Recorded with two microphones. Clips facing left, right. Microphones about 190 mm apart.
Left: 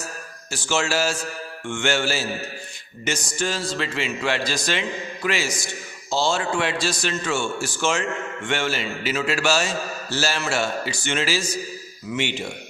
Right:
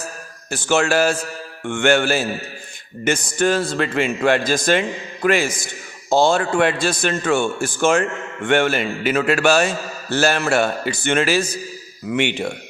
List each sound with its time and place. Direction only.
0.5 s a man's voice: 55° right (ahead or behind)